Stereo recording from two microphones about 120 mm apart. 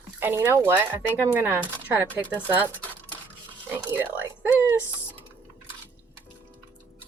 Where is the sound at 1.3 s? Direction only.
15° right (ahead or behind).